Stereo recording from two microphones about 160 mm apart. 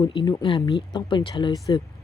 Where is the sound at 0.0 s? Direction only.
30° left (ahead or behind).